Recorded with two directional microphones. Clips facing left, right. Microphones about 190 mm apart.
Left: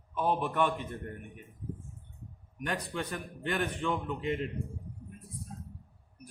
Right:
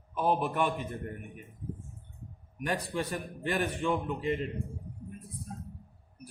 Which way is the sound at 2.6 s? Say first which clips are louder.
Right 3 dB; 10° right (ahead or behind).